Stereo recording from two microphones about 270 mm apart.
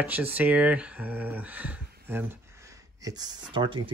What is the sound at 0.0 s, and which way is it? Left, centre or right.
Speech, centre.